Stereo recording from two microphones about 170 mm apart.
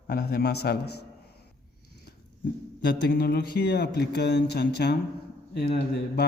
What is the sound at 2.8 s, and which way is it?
A man's voice, 75° left (ahead or behind).